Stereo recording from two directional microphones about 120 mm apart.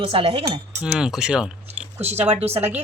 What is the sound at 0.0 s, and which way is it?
Cutlery, 50° right (ahead or behind).